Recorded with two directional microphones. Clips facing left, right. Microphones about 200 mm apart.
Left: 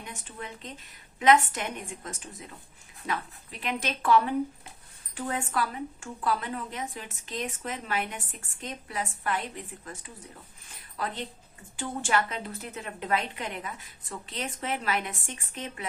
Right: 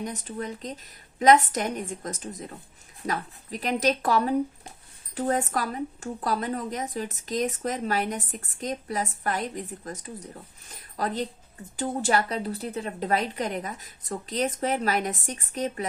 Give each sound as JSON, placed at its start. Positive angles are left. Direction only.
{"t": 0.0, "sound": "a woman's voice", "side_deg": -40}